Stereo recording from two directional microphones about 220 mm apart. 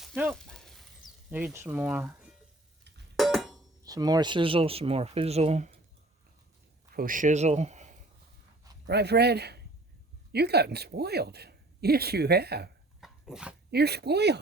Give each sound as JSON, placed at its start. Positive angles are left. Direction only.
{"t": 0.0, "sound": "a sound", "side_deg": 0}
{"t": 1.3, "sound": "speech", "side_deg": -5}
{"t": 3.2, "sound": "a sound", "side_deg": 0}
{"t": 3.8, "sound": "speech", "side_deg": -15}
{"t": 6.9, "sound": "speech", "side_deg": -40}
{"t": 8.9, "sound": "speech", "side_deg": -50}
{"t": 13.0, "sound": "dog", "side_deg": 0}
{"t": 13.7, "sound": "speech", "side_deg": -45}